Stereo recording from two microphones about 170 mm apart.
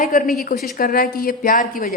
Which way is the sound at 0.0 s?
45° left (ahead or behind).